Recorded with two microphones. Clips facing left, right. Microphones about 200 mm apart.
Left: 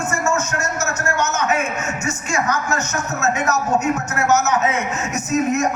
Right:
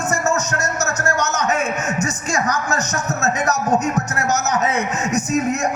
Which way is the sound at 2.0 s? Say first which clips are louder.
Right 1 dB; 35° right (ahead or behind).